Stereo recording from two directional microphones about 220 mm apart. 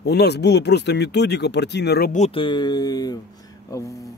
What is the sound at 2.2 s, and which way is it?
Speech, 25° left (ahead or behind).